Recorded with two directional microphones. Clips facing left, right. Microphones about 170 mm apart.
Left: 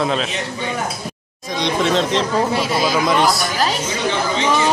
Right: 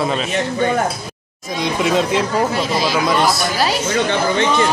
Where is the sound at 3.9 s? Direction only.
55° right (ahead or behind).